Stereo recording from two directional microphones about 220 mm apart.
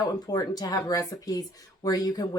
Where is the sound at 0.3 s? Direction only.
15° left (ahead or behind).